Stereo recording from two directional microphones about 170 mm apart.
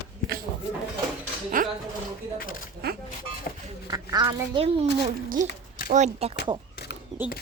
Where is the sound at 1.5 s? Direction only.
55° right (ahead or behind).